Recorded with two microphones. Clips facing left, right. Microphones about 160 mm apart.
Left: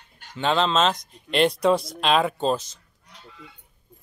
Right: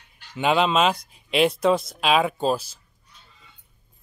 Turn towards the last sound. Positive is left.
turn(degrees=70)  # may be behind; listen again after turning